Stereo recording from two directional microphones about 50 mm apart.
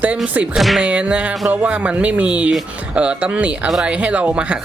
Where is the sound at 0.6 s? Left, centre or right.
Centre.